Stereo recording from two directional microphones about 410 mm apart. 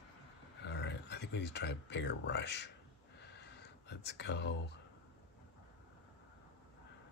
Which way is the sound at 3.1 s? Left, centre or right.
Left.